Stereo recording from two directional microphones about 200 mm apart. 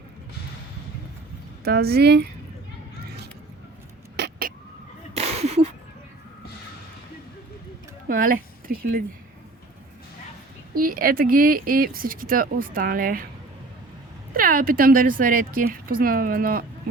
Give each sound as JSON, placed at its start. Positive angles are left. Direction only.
{"t": 1.6, "sound": "speech", "side_deg": -50}
{"t": 4.2, "sound": "vehicle", "side_deg": -50}
{"t": 5.1, "sound": "a sound", "side_deg": -30}
{"t": 8.0, "sound": "speech", "side_deg": -45}
{"t": 10.8, "sound": "speech", "side_deg": -45}
{"t": 14.3, "sound": "speech", "side_deg": -45}